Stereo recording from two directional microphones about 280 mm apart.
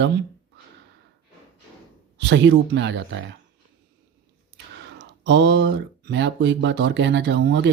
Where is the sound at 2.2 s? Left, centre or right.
Right.